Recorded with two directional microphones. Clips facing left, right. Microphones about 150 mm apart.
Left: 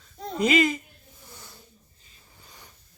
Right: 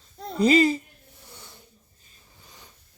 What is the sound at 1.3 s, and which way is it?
Snake, 20° right (ahead or behind).